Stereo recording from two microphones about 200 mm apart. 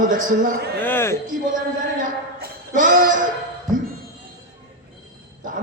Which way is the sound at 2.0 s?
40° right (ahead or behind).